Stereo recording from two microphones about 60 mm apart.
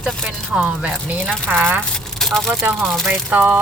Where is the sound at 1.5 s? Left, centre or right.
Right.